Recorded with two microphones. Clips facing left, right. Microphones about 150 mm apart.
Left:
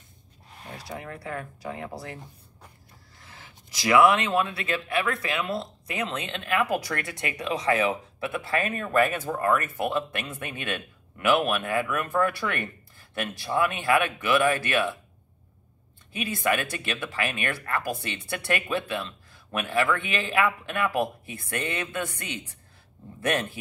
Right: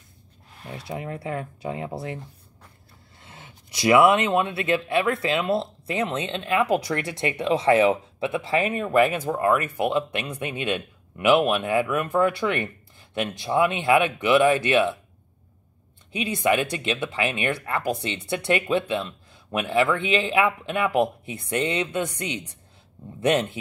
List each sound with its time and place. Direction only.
0.7 s speech: 20° right (ahead or behind)
3.2 s speech: 25° right (ahead or behind)
16.1 s speech: 20° right (ahead or behind)